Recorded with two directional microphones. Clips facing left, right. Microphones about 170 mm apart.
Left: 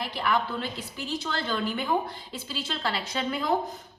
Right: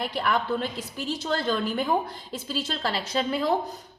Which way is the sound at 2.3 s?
40° right (ahead or behind).